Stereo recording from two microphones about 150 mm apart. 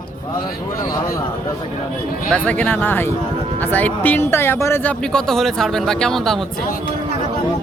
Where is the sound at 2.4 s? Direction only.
10° left (ahead or behind).